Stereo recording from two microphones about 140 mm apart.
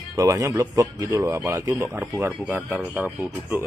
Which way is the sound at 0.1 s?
20° right (ahead or behind).